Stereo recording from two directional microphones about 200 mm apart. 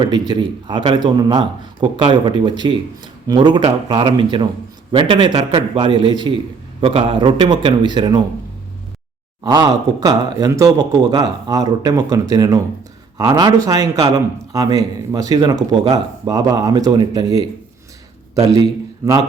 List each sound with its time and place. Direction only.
0.0 s speech: 20° right (ahead or behind)
9.4 s speech: 20° right (ahead or behind)
19.0 s speech: 15° right (ahead or behind)